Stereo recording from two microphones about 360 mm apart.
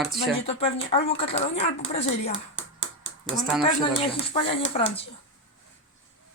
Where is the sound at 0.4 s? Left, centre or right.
Centre.